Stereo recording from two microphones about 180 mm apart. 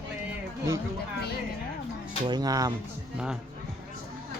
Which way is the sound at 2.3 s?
20° right (ahead or behind).